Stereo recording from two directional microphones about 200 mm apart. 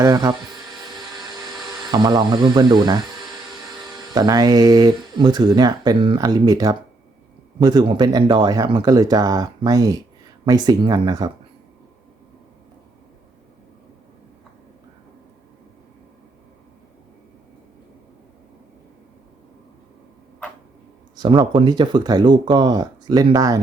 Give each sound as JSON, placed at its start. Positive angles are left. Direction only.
{"t": 0.0, "sound": "a sound", "side_deg": -20}
{"t": 1.8, "sound": "speech", "side_deg": -20}
{"t": 21.2, "sound": "speech", "side_deg": -20}